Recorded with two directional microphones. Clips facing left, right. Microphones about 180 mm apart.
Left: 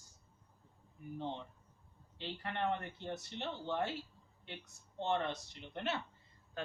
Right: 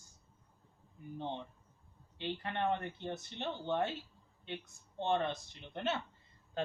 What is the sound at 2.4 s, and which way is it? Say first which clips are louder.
A man's voice: right 1 dB; 20° right (ahead or behind).